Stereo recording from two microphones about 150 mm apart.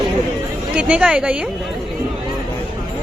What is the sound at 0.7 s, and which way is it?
Speech, 5° right (ahead or behind).